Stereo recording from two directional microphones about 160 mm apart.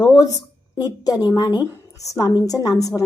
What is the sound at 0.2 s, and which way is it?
Speech, 20° left (ahead or behind).